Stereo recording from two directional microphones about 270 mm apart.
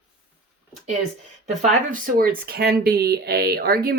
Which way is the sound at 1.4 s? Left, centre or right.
Right.